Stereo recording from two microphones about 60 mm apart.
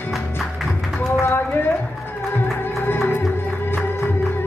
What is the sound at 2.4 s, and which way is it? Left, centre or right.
Music, left.